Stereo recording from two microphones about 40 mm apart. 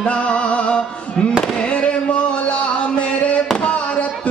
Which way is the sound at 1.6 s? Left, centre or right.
Left.